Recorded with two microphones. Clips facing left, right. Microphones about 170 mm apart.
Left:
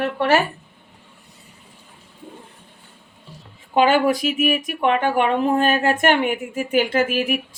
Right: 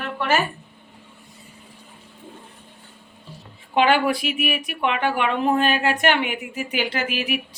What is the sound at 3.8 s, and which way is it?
Speech, 40° left (ahead or behind).